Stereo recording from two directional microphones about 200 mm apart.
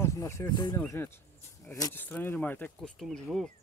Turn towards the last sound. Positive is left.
turn(degrees=0)  # may be behind; listen again after turning